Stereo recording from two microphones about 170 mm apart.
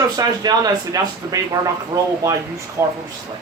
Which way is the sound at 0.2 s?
20° right (ahead or behind).